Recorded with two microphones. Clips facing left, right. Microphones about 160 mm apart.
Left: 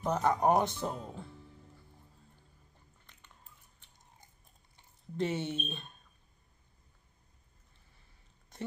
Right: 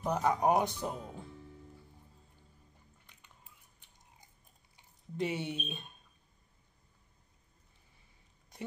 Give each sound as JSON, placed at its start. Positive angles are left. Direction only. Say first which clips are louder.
{"t": 0.1, "sound": "speech", "louder": "left 1 dB", "side_deg": -5}
{"t": 5.1, "sound": "speech", "louder": "left 2 dB", "side_deg": -10}